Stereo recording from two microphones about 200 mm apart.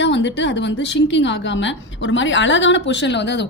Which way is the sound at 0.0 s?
60° left (ahead or behind).